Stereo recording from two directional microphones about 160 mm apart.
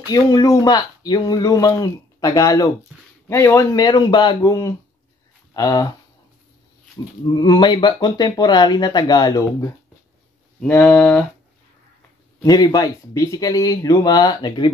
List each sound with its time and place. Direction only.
0.1 s speech: 20° left (ahead or behind)
7.3 s speech: 30° left (ahead or behind)
10.6 s a sound: 10° left (ahead or behind)
12.4 s speech: 25° left (ahead or behind)